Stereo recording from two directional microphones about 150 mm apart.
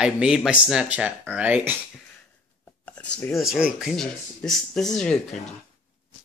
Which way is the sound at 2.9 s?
10° left (ahead or behind).